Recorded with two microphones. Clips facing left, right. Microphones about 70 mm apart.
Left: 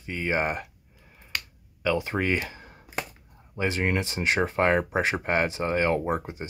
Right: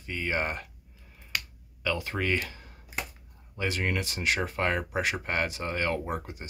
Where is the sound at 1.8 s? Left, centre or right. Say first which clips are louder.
Left 4 dB; left.